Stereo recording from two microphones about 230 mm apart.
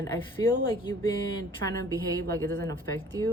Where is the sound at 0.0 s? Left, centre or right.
Centre.